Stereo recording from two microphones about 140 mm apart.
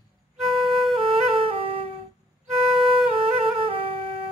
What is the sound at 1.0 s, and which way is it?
Music, 40° right (ahead or behind).